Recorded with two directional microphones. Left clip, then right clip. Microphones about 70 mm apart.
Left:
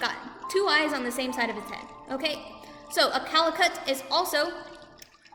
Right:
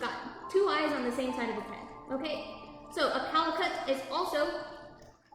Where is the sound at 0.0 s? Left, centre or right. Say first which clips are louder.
Left 5 dB; centre.